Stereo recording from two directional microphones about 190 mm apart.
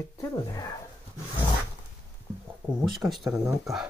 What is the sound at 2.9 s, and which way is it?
Speech, centre (ahead or behind).